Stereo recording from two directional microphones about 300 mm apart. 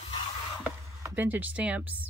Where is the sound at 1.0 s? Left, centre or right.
Centre.